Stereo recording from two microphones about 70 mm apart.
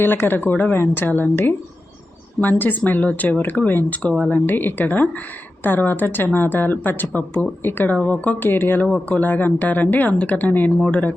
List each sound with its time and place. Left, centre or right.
0.0 s speech: left; by 11.1 s centre